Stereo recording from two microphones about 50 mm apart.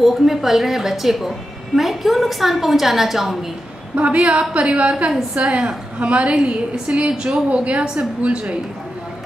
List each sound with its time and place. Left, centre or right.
0.0 s a woman's voice: centre
3.9 s a woman's voice: right